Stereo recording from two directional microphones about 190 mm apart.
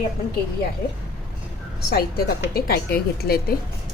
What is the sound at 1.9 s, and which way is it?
A woman's voice, 55° left (ahead or behind).